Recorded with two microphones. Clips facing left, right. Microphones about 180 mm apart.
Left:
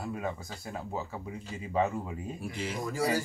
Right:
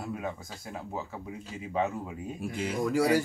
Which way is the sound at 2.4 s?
50° right (ahead or behind).